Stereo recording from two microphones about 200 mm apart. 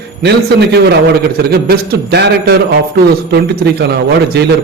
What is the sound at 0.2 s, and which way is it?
A man's voice, 55° right (ahead or behind).